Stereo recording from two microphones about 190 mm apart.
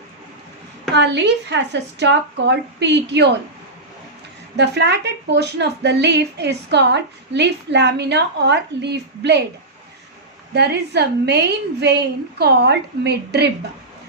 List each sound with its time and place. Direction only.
0.9 s speech: 65° right (ahead or behind)
4.5 s speech: 60° right (ahead or behind)
10.5 s speech: 60° right (ahead or behind)